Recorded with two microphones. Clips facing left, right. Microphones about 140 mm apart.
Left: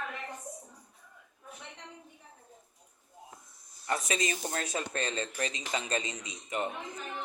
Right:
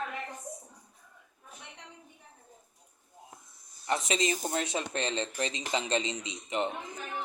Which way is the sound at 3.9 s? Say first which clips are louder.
Right 2 dB; 25° right (ahead or behind).